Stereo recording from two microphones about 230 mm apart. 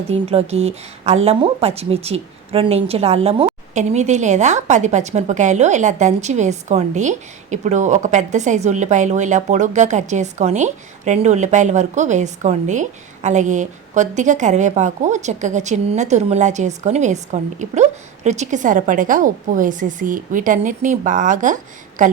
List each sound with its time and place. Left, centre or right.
0.1 s a woman's voice: right